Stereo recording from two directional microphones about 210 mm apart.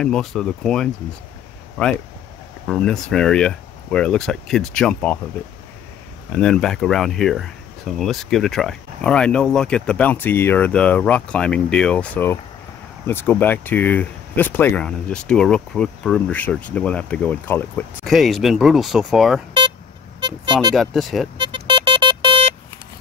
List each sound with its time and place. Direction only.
0.0 s speech: 5° left (ahead or behind)
2.6 s speech: centre (ahead or behind)
6.3 s speech: 5° left (ahead or behind)
20.2 s vehicle: 20° right (ahead or behind)
20.7 s speech: centre (ahead or behind)
21.4 s a sound: 20° right (ahead or behind)